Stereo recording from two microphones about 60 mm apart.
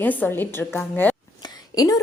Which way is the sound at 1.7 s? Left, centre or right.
Left.